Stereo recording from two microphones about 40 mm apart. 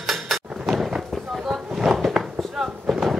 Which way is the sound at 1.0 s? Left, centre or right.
Centre.